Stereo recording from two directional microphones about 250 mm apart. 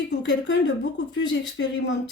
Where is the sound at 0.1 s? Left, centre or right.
Left.